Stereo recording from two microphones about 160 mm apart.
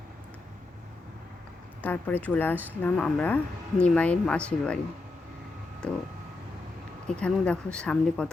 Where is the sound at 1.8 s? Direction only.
10° left (ahead or behind).